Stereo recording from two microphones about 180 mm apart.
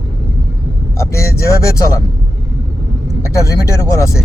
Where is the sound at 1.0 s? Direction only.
15° left (ahead or behind).